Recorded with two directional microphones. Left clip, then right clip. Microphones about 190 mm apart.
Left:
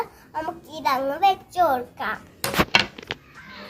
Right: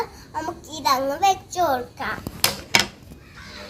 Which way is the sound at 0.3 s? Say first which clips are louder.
Even; 5° left (ahead or behind).